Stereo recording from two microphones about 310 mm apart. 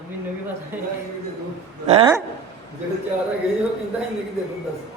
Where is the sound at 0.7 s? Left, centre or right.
Centre.